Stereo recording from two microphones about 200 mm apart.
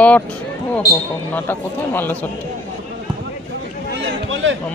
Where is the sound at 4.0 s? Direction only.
65° right (ahead or behind).